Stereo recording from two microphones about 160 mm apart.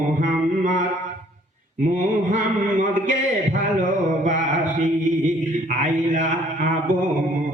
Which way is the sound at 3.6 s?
55° right (ahead or behind).